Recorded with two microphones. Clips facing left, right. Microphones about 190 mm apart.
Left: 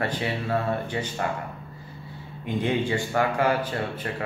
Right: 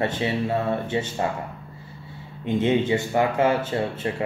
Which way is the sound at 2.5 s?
20° right (ahead or behind).